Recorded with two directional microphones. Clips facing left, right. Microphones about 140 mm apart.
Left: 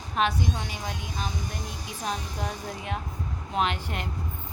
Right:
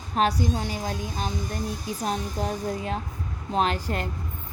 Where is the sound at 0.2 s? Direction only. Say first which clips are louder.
Right 3 dB; 40° right (ahead or behind).